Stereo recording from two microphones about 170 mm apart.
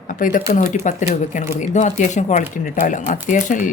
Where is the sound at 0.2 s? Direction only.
55° left (ahead or behind).